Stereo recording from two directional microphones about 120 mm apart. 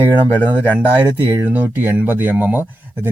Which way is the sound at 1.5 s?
15° right (ahead or behind).